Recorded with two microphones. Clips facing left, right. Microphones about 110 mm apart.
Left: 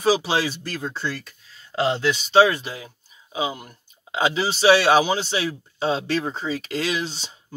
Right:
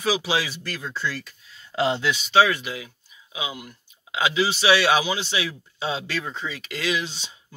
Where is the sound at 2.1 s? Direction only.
30° left (ahead or behind).